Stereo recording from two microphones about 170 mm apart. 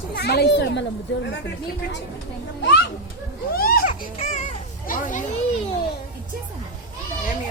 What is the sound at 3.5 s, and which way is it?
Baby cry, 60° left (ahead or behind).